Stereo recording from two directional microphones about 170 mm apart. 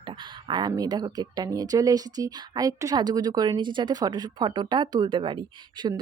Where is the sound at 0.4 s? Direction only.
25° right (ahead or behind).